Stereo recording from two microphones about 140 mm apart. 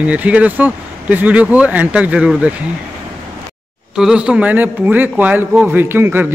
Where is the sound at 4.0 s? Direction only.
5° right (ahead or behind).